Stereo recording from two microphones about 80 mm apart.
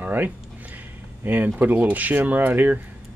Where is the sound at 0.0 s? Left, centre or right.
Right.